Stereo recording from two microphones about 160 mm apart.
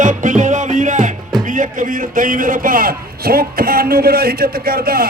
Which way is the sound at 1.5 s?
55° right (ahead or behind).